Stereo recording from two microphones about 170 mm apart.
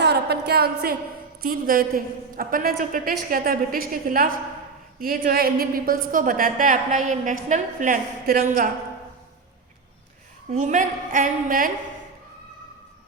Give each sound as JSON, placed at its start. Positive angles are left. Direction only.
{"t": 0.0, "sound": "a sound", "side_deg": -75}
{"t": 1.4, "sound": "a woman's voice", "side_deg": -55}
{"t": 10.5, "sound": "a woman's voice", "side_deg": -45}